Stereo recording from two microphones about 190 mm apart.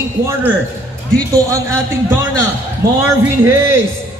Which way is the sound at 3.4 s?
15° right (ahead or behind).